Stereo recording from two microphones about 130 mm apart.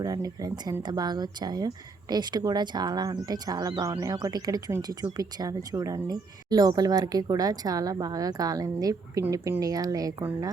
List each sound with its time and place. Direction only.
0.0 s speech: 25° right (ahead or behind)